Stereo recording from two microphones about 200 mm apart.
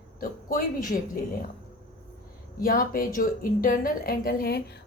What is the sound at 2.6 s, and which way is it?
A woman's voice, 45° left (ahead or behind).